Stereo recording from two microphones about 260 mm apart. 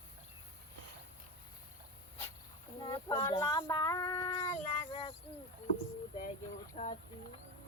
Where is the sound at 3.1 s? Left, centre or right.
Centre.